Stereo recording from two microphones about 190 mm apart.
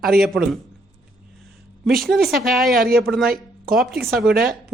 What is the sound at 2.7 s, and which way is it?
Speech, 50° right (ahead or behind).